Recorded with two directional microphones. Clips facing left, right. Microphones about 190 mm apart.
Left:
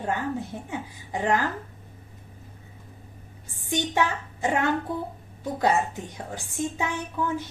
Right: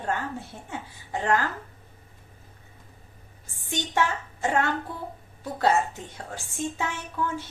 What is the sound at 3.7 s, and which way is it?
Speech, 15° left (ahead or behind).